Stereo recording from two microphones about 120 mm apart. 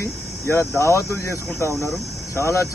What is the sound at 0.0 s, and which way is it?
Speech, 20° left (ahead or behind).